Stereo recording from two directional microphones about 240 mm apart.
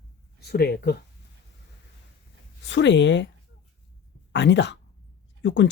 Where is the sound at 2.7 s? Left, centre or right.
Left.